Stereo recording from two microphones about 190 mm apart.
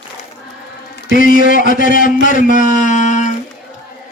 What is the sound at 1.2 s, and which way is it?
A man's voice, 45° left (ahead or behind).